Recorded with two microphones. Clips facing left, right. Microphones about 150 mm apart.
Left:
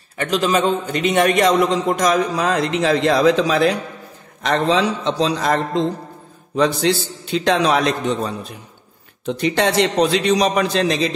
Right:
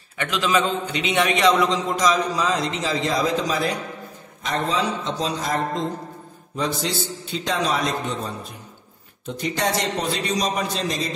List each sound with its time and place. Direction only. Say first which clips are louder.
0.2 s a man's voice: left 4 dB; 40° left (ahead or behind); by 11.1 s 75° left (ahead or behind)